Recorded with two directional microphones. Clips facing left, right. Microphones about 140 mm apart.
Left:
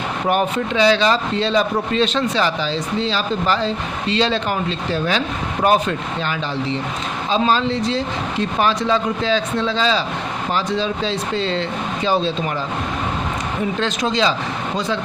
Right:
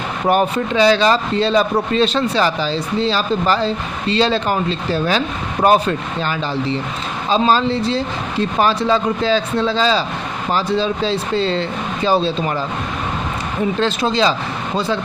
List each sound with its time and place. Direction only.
0.3 s speech: 40° right (ahead or behind)
13.7 s speech: 35° right (ahead or behind)